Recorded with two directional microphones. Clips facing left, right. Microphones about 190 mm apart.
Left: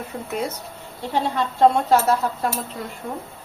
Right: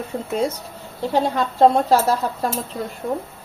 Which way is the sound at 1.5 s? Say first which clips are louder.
Right 1 dB; 35° right (ahead or behind).